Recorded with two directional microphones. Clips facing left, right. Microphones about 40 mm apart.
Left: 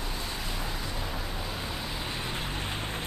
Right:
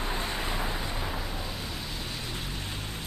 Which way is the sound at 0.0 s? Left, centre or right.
Right.